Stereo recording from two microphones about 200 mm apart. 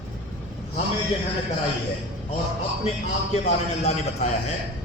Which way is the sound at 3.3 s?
35° left (ahead or behind).